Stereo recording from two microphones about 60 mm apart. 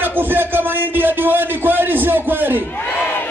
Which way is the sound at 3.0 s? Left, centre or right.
Left.